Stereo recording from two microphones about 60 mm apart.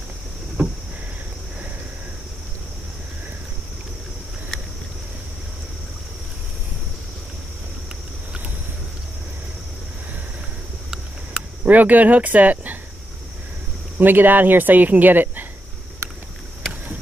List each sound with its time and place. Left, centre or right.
11.6 s speech: right
13.9 s speech: right